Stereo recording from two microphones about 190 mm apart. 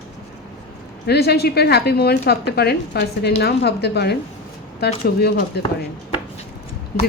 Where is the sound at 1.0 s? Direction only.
55° left (ahead or behind).